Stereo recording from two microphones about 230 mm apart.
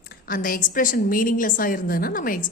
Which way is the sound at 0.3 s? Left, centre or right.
Left.